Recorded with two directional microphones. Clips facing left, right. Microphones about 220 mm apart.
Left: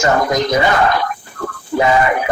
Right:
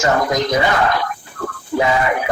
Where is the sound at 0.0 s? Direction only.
50° left (ahead or behind).